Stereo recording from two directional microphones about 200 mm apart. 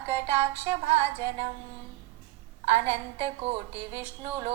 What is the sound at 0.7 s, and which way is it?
Music, 30° right (ahead or behind).